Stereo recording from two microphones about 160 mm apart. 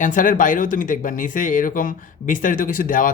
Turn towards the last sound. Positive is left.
turn(degrees=60)  # may be behind; listen again after turning